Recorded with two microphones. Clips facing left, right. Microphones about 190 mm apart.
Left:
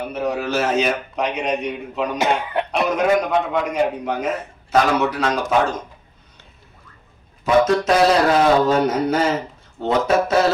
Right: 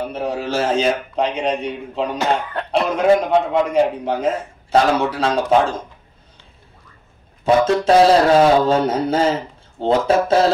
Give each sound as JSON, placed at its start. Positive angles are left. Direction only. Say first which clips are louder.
{"t": 0.0, "sound": "a man's voice", "louder": "even", "side_deg": -30}
{"t": 7.4, "sound": "a man's voice", "louder": "right 1 dB", "side_deg": -30}